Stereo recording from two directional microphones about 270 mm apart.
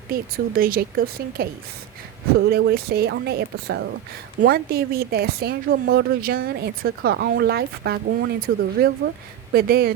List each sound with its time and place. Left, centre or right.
0.1 s speech: right
2.5 s speech: right